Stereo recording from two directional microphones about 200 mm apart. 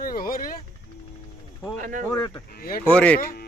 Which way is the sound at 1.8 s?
40° right (ahead or behind).